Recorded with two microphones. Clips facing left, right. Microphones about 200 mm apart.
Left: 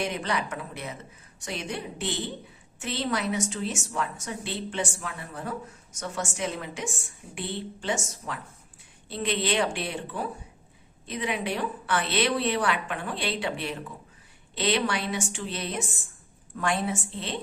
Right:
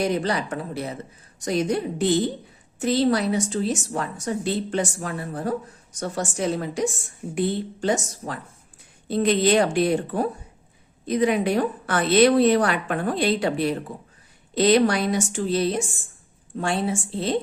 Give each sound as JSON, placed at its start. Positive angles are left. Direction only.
{"t": 0.0, "sound": "a woman's voice", "side_deg": -35}